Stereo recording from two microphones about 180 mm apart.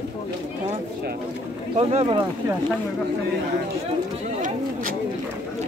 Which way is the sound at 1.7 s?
30° right (ahead or behind).